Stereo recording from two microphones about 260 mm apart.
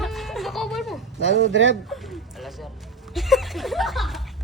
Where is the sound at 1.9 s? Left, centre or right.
Centre.